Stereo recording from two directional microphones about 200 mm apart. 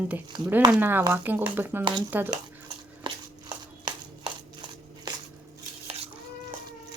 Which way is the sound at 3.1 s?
25° right (ahead or behind).